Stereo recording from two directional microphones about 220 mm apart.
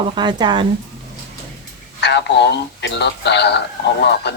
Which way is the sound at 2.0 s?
50° left (ahead or behind).